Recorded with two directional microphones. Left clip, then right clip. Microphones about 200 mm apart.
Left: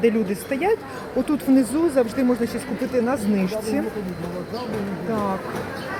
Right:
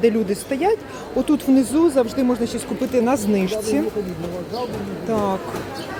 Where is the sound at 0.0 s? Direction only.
15° right (ahead or behind).